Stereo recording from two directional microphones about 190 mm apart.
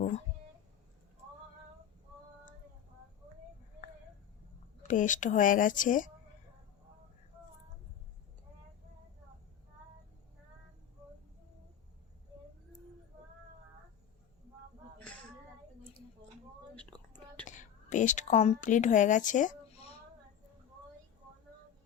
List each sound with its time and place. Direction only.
4.8 s speech: 45° left (ahead or behind)
14.9 s a sound: 5° left (ahead or behind)
16.9 s whispering: 10° left (ahead or behind)
17.4 s whispering: 40° left (ahead or behind)